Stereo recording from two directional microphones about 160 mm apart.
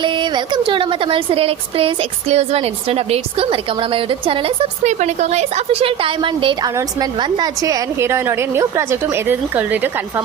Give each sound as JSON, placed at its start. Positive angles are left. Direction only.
{"t": 0.0, "sound": "a woman's voice", "side_deg": -30}